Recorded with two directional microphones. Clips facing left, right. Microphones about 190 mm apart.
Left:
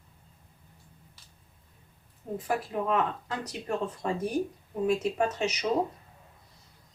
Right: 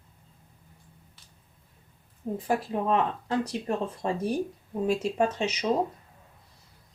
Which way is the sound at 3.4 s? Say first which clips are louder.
Right 2 dB; 25° right (ahead or behind).